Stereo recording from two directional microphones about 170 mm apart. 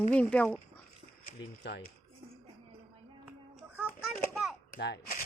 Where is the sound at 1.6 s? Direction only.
80° left.